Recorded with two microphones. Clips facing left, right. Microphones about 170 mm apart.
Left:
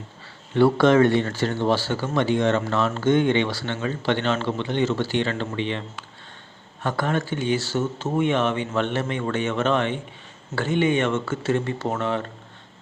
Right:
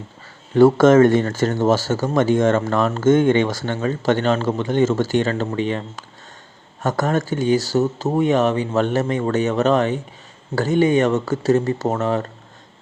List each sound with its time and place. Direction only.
0.5 s speech: 45° right (ahead or behind)